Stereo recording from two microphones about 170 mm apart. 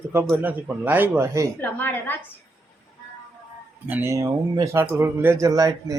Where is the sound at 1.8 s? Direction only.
10° left (ahead or behind).